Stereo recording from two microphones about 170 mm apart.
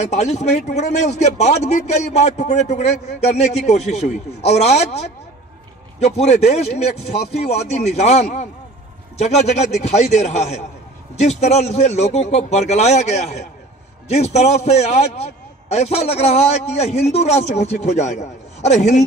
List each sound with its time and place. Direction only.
0.0 s a man's voice: 40° left (ahead or behind)